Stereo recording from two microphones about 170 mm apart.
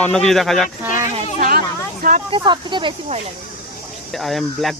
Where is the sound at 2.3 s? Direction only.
25° right (ahead or behind).